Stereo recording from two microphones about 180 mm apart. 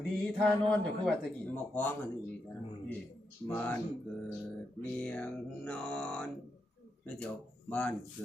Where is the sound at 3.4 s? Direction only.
10° left (ahead or behind).